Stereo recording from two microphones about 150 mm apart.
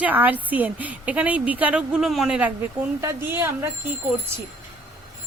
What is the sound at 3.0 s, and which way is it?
Speech, 15° right (ahead or behind).